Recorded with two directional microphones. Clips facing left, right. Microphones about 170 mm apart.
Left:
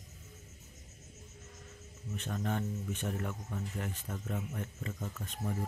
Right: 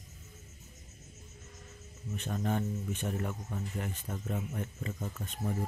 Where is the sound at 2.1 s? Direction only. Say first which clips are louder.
Right 3 dB; 10° right (ahead or behind).